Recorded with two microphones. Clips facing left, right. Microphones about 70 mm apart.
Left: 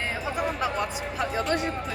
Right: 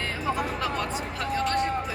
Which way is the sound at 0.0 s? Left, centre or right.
Centre.